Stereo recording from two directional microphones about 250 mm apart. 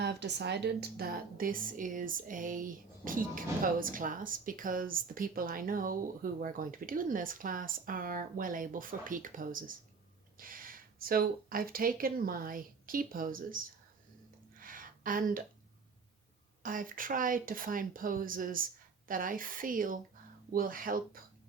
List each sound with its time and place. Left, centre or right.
0.0 s a woman's voice: right
14.6 s a sound: right
16.6 s a woman's voice: right